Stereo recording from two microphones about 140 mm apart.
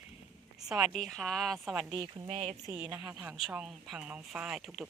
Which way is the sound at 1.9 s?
30° right (ahead or behind).